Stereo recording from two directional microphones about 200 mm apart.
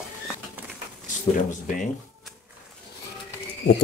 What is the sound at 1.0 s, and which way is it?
Speech, 40° left (ahead or behind).